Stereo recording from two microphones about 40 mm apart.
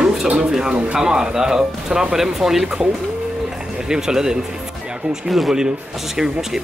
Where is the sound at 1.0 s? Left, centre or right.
Centre.